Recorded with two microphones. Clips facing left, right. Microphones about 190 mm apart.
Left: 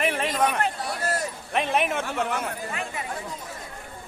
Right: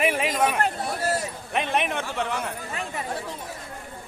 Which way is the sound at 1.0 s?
5° right (ahead or behind).